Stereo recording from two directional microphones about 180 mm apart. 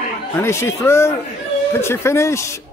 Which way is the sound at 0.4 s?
15° left (ahead or behind).